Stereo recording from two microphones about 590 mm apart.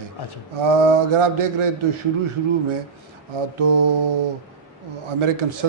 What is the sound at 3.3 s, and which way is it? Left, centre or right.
Speech, right.